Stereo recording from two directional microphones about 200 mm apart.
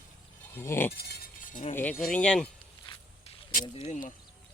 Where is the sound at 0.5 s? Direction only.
10° left (ahead or behind).